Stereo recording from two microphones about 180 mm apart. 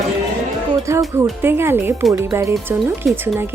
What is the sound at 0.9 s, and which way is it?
Speech, 15° right (ahead or behind).